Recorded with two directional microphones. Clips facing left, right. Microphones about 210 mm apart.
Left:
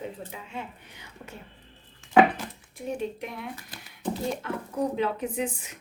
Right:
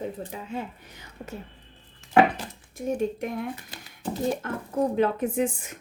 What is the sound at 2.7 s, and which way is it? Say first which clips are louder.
Speech: right 5 dB; 45° right (ahead or behind).